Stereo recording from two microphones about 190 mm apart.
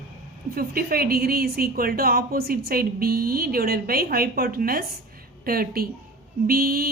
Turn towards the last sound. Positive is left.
turn(degrees=-50)  # may be behind; listen again after turning